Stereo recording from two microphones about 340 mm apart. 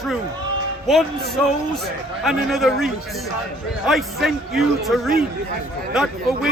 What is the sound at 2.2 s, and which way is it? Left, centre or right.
A man's voice, centre.